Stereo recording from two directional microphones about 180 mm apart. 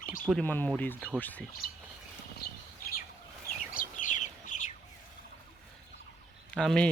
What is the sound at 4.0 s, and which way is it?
Chicken, 45° left (ahead or behind).